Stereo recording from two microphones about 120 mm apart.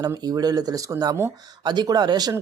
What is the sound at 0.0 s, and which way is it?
Speech, 35° right (ahead or behind).